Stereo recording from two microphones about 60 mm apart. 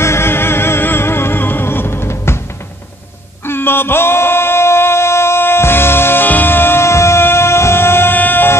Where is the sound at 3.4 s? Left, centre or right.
Left.